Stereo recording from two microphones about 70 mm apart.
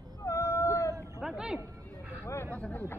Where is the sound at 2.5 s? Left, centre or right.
Centre.